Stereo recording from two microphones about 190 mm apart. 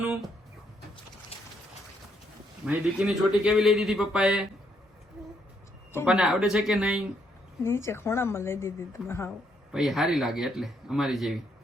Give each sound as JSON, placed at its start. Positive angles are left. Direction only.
{"t": 0.0, "sound": "a sound", "side_deg": -10}
{"t": 1.3, "sound": "a sound", "side_deg": 30}
{"t": 2.6, "sound": "speech", "side_deg": -5}
{"t": 6.1, "sound": "speech", "side_deg": -5}
{"t": 7.6, "sound": "speech", "side_deg": 15}
{"t": 9.7, "sound": "speech", "side_deg": 0}